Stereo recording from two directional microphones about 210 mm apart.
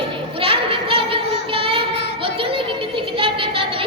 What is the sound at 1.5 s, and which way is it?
Child singing, 25° right (ahead or behind).